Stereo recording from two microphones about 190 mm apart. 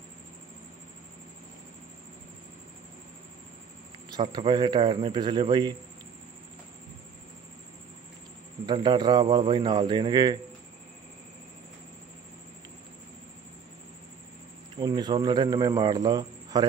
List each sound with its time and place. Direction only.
4.2 s speech: 25° right (ahead or behind)
8.6 s speech: 25° right (ahead or behind)
14.8 s speech: 20° right (ahead or behind)